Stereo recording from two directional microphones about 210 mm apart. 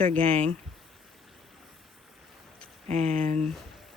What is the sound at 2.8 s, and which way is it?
Speech, 30° right (ahead or behind).